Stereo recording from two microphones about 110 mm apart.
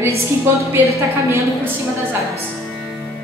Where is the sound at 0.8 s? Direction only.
25° right (ahead or behind).